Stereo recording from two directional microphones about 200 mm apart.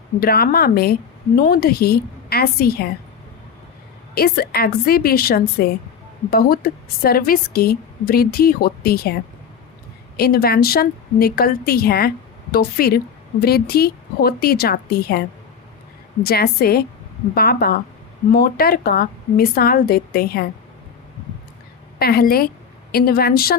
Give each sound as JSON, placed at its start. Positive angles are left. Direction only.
{"t": 0.2, "sound": "a woman's voice", "side_deg": 50}
{"t": 4.1, "sound": "a woman's voice", "side_deg": 50}
{"t": 10.2, "sound": "a woman's voice", "side_deg": 50}
{"t": 16.2, "sound": "a woman's voice", "side_deg": 50}
{"t": 21.9, "sound": "a woman's voice", "side_deg": 50}